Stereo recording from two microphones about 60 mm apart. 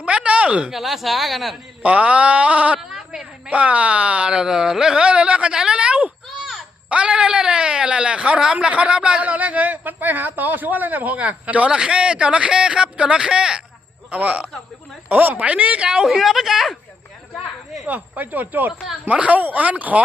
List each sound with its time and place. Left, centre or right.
0.0 s speech: centre
0.7 s a woman's voice: centre
1.8 s a man's voice: right
2.9 s a sound: centre
3.5 s speech: right
6.4 s a sound: centre
6.9 s a man's voice: centre
14.1 s a man's voice: right
15.9 s a woman's voice: centre
17.8 s a man's voice: right